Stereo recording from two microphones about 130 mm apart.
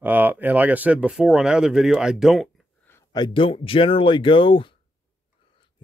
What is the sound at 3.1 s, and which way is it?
Speech, 35° left (ahead or behind).